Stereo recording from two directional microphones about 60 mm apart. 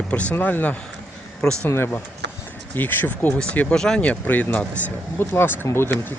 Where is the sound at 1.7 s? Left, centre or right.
Left.